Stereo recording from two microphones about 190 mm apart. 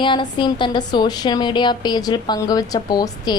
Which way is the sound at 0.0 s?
25° left (ahead or behind).